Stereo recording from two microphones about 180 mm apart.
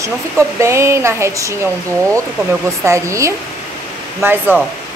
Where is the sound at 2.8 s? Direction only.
15° right (ahead or behind).